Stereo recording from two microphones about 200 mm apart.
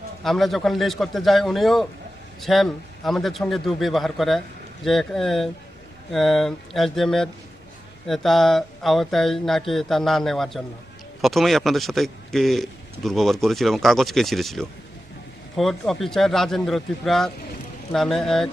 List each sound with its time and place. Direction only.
0.3 s speech: centre (ahead or behind)